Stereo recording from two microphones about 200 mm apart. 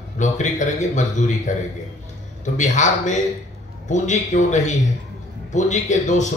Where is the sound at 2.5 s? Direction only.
35° left (ahead or behind).